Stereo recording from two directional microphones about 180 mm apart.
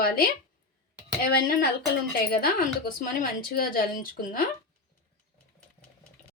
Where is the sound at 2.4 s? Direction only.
55° left (ahead or behind).